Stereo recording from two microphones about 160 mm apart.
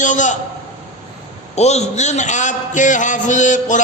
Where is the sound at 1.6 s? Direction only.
45° left (ahead or behind).